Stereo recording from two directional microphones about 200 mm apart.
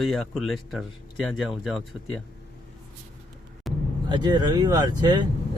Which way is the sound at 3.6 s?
Centre (ahead or behind).